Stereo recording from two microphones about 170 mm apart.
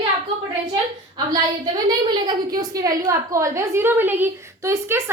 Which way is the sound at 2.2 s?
25° right (ahead or behind).